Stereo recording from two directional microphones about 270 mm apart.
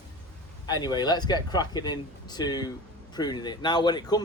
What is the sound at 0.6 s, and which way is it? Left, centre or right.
Speech, centre.